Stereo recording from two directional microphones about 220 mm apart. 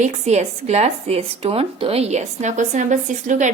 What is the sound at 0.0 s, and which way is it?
Speech, 30° right (ahead or behind).